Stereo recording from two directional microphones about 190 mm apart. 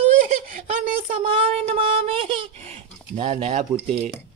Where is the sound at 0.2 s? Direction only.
45° right (ahead or behind).